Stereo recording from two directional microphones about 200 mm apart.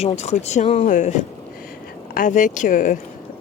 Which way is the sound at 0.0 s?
35° left (ahead or behind).